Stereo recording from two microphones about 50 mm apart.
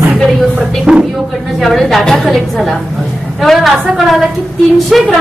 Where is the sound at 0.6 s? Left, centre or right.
Centre.